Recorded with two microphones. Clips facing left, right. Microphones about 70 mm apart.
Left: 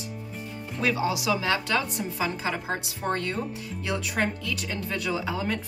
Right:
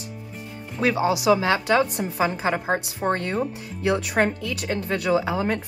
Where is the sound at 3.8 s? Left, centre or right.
Right.